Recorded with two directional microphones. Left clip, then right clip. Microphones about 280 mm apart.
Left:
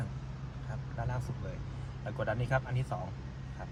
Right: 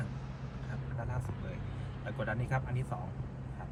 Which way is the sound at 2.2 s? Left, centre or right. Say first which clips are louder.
Left 4 dB; left.